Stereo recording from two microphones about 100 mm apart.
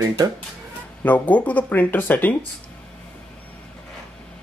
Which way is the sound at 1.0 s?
15° left (ahead or behind).